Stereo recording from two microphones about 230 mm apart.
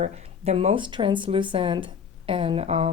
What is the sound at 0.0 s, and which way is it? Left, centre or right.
Speech, right.